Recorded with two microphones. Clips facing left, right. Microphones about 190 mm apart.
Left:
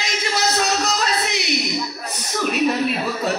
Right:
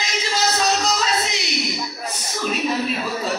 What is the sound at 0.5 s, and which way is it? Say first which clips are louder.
Music: even; 60° left (ahead or behind).